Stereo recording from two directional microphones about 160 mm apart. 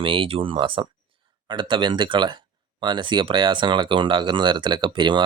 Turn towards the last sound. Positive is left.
turn(degrees=-30)  # may be behind; listen again after turning